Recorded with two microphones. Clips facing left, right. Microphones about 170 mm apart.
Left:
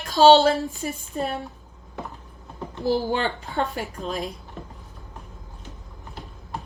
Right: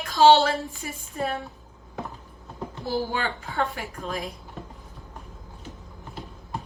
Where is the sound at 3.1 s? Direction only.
25° left (ahead or behind).